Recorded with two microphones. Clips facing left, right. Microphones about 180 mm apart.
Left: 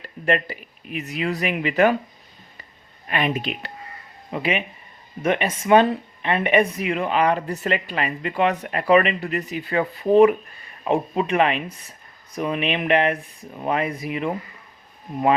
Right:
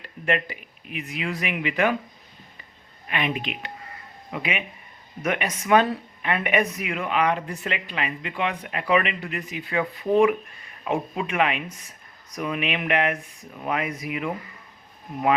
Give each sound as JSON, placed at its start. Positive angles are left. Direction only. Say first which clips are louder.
{"t": 0.3, "sound": "speech", "louder": "left 3 dB", "side_deg": 40}
{"t": 3.1, "sound": "speech", "louder": "left 4 dB", "side_deg": 40}